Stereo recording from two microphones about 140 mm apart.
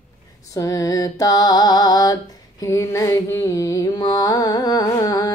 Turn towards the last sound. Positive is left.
turn(degrees=25)  # may be behind; listen again after turning